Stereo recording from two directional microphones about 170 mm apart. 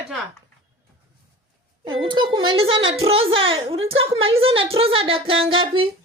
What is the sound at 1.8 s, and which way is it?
A woman's voice, 25° right (ahead or behind).